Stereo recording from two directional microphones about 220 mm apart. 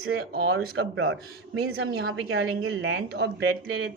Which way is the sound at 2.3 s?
55° right (ahead or behind).